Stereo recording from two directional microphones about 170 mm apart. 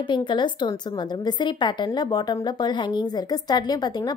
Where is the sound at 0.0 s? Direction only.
25° left (ahead or behind).